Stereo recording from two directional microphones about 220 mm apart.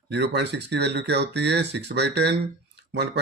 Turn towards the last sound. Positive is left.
turn(degrees=-50)  # may be behind; listen again after turning